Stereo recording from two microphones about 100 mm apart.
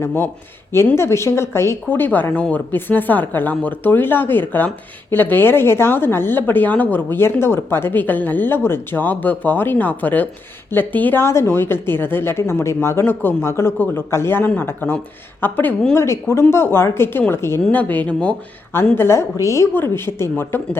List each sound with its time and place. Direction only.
0.0 s a woman's voice: 25° left (ahead or behind)
18.9 s a woman's voice: 25° left (ahead or behind)